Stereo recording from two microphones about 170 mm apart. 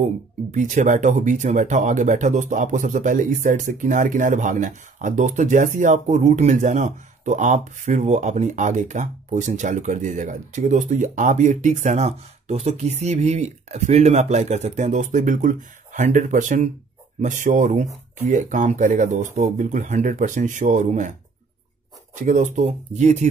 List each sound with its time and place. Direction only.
0.5 s speech: 50° right (ahead or behind)
22.2 s speech: 45° right (ahead or behind)